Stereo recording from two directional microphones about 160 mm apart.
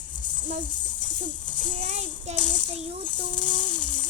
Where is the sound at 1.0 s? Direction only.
50° left (ahead or behind).